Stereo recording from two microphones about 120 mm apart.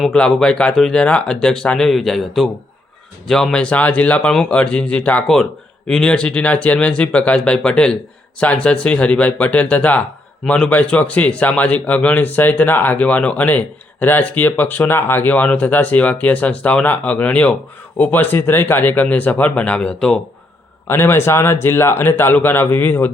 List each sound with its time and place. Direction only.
0.1 s speech: 5° left (ahead or behind)
20.8 s speech: 20° left (ahead or behind)